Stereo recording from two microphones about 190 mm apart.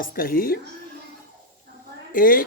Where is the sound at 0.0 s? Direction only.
50° left (ahead or behind).